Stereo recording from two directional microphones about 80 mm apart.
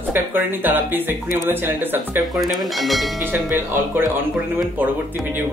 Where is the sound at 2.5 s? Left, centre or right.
Centre.